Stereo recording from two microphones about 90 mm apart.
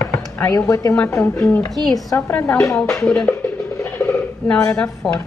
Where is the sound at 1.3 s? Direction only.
15° left (ahead or behind).